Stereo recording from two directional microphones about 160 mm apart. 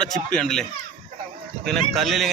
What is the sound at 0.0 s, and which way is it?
Speech, 5° left (ahead or behind).